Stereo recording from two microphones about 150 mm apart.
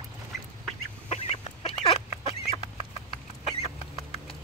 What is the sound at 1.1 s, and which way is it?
Chicken, 45° left (ahead or behind).